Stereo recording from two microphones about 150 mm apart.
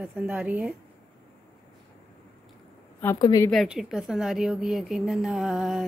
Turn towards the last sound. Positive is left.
turn(degrees=0)  # may be behind; listen again after turning